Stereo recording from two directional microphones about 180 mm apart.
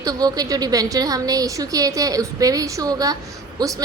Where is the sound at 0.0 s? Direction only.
20° right (ahead or behind).